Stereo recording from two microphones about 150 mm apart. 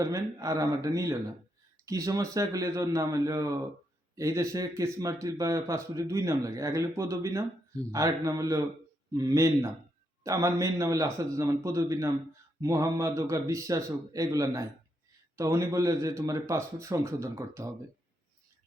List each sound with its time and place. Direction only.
0.0 s speech: 20° right (ahead or behind)